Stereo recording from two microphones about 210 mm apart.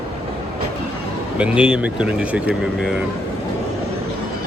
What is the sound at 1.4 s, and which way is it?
Speech, 5° right (ahead or behind).